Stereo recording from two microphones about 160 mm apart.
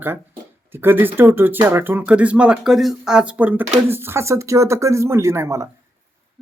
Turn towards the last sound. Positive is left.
turn(degrees=-15)  # may be behind; listen again after turning